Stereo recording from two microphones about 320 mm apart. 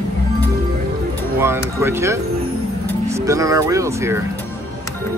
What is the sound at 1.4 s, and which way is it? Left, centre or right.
Speech, centre.